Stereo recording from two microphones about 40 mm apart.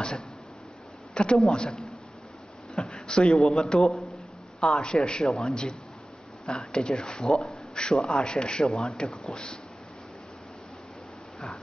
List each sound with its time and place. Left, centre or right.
1.1 s a man's voice: left
2.8 s a sound: left
3.1 s a man's voice: left